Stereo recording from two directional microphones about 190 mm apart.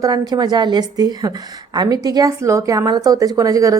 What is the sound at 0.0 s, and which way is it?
A woman's voice, 20° right (ahead or behind).